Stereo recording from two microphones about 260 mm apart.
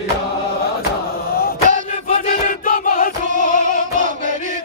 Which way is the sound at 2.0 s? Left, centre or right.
Left.